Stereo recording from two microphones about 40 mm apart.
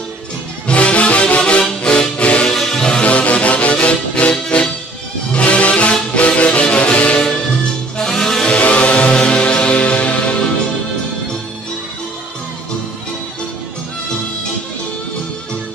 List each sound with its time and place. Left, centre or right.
0.7 s music: left
2.5 s music: centre
3.0 s music: left
7.2 s music: centre
8.5 s music: left